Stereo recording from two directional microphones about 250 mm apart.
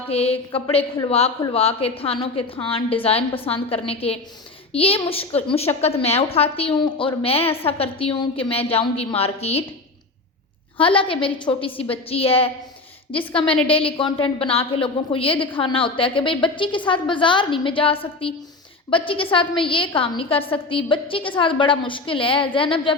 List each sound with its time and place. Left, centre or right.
0.1 s a woman's voice: left
10.8 s a woman's voice: left